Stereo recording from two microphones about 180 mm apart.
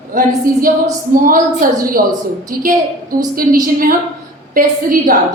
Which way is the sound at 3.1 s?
50° right (ahead or behind).